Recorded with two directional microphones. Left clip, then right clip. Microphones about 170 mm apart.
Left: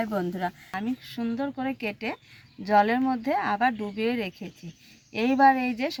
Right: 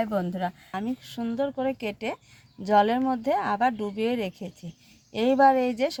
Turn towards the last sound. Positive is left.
turn(degrees=-60)  # may be behind; listen again after turning